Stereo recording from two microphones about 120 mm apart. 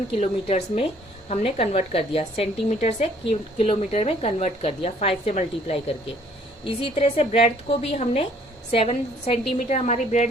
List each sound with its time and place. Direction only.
0.1 s a woman's voice: 55° left (ahead or behind)
3.8 s a woman's voice: 65° left (ahead or behind)
6.7 s a woman's voice: 50° left (ahead or behind); by 10.2 s 80° left